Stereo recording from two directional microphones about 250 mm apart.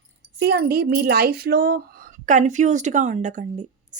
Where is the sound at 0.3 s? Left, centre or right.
Right.